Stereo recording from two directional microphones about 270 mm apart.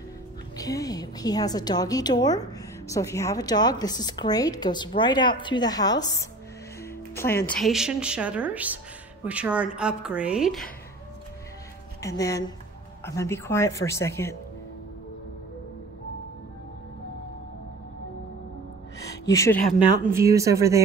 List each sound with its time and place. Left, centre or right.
0.6 s a woman's voice: centre
7.4 s a woman's voice: centre
12.0 s a woman's voice: centre
19.2 s a woman's voice: centre
20.1 s speech: centre